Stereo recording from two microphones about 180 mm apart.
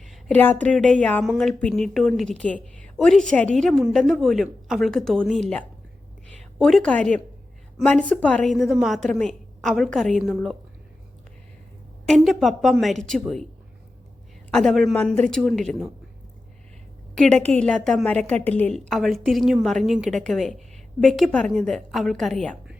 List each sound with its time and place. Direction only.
0.1 s a woman's voice: 5° left (ahead or behind)
6.3 s a woman's voice: centre (ahead or behind)
12.0 s a woman's voice: centre (ahead or behind)
14.5 s a woman's voice: centre (ahead or behind)
17.2 s a woman's voice: 5° left (ahead or behind)